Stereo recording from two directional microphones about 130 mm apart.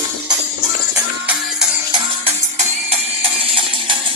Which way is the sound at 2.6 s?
50° right (ahead or behind).